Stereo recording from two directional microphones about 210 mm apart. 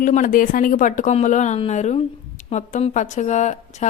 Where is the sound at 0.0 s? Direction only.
40° left (ahead or behind).